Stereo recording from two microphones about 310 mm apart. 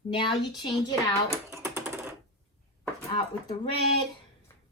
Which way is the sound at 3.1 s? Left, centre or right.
Centre.